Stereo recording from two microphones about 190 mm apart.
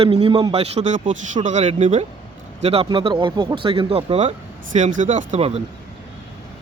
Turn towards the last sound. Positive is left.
turn(degrees=-35)  # may be behind; listen again after turning